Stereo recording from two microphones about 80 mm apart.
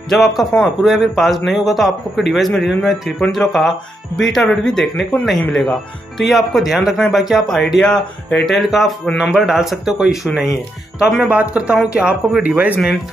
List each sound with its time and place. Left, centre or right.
0.4 s speech: centre
11.2 s speech: centre